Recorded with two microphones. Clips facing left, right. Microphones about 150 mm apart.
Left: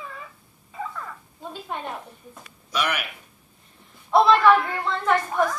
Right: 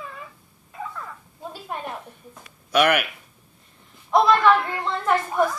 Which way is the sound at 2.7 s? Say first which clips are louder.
Right 8 dB; 60° right (ahead or behind).